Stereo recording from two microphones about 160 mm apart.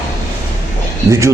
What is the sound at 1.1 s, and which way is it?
Speech, 20° right (ahead or behind).